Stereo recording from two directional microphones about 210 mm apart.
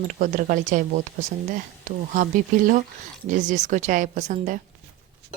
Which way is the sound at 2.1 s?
40° right (ahead or behind).